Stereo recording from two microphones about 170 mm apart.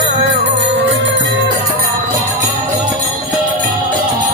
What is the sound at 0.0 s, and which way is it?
Music, 90° right.